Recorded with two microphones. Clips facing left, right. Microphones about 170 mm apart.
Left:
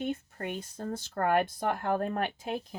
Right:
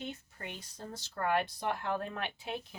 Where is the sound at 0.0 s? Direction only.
50° left (ahead or behind).